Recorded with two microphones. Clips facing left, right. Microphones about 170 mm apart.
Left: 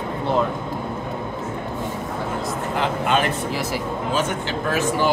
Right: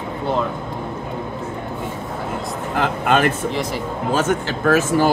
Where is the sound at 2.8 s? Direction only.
50° right (ahead or behind).